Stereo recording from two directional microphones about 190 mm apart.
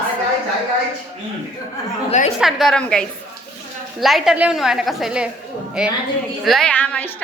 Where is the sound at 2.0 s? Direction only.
35° left (ahead or behind).